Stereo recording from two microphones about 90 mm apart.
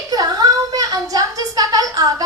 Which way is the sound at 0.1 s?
45° right (ahead or behind).